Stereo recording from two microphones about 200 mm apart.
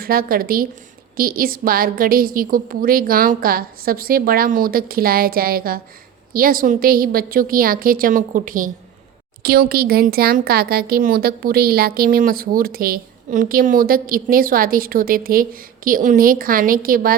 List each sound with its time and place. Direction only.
0.0 s speech: 45° right (ahead or behind)